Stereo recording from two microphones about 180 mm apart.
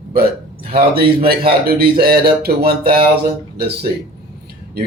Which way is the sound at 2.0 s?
60° right (ahead or behind).